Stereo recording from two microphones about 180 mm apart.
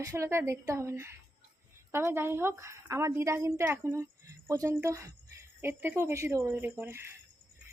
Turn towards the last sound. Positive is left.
turn(degrees=-10)  # may be behind; listen again after turning